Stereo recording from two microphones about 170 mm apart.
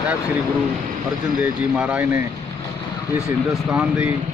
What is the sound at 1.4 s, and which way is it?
Speech, 10° right (ahead or behind).